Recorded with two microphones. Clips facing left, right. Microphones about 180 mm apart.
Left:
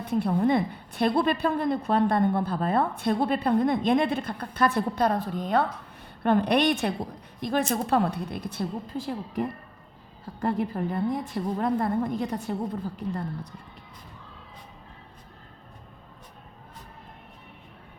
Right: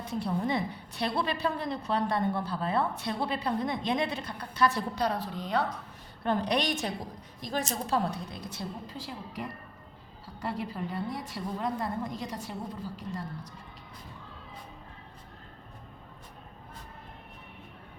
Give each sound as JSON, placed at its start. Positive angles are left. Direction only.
{"t": 0.0, "sound": "a woman's voice", "side_deg": 55}